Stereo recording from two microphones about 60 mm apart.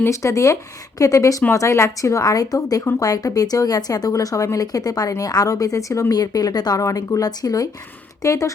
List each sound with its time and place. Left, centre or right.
0.1 s speech: left
1.5 s a woman's voice: left
4.5 s a woman's voice: left
8.2 s speech: left